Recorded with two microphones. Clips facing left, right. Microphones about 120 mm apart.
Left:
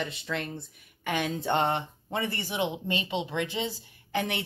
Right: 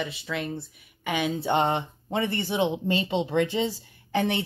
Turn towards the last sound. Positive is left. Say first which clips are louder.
# right 5 dB
turn(degrees=-25)  # may be behind; listen again after turning